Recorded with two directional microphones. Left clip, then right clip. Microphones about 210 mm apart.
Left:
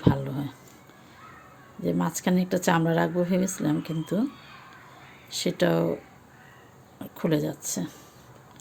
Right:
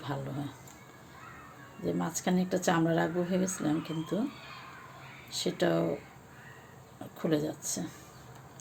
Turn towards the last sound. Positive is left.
turn(degrees=30)  # may be behind; listen again after turning